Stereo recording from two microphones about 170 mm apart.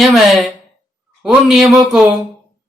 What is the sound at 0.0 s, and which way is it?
Speech, centre (ahead or behind).